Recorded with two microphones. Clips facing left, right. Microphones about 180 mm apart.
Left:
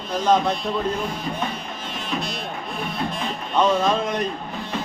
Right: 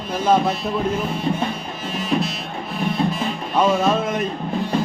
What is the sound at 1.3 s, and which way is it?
Music, 30° right (ahead or behind).